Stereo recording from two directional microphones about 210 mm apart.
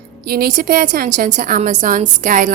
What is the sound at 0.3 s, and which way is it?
A woman's voice, 45° right (ahead or behind).